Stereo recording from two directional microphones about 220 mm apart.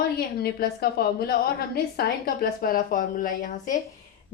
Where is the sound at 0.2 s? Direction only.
45° left (ahead or behind).